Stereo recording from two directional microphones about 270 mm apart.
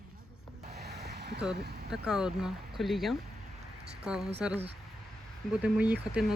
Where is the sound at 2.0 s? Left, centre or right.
Centre.